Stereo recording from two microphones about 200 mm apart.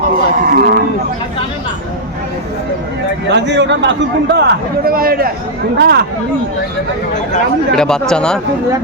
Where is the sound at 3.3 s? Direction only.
60° right (ahead or behind).